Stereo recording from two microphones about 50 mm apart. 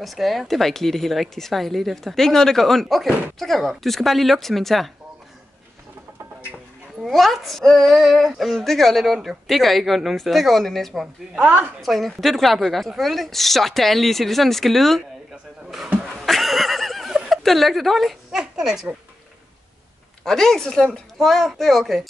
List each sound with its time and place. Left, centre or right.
0.0 s a woman's voice: centre
7.1 s a woman's voice: centre
11.4 s a woman's voice: right
11.8 s a woman's voice: centre
16.3 s neigh: centre
17.3 s a woman's voice: centre
18.3 s speech: centre
20.2 s a woman's voice: centre
21.2 s a woman's voice: centre